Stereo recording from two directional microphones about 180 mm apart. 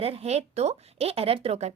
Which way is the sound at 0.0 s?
35° right (ahead or behind).